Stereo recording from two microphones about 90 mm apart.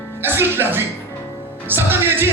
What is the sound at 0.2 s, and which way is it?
Music, 25° right (ahead or behind).